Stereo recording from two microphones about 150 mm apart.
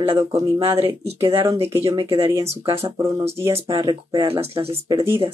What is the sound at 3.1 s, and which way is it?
Speech, 40° right (ahead or behind).